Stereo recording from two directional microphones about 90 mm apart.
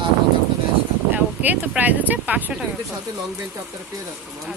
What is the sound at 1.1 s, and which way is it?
Speech, 20° right (ahead or behind).